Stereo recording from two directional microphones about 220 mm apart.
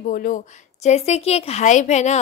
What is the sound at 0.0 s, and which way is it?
A woman's voice, 40° left (ahead or behind).